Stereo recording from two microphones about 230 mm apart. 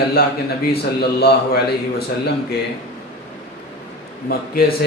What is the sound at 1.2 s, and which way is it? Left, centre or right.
A man's voice, left.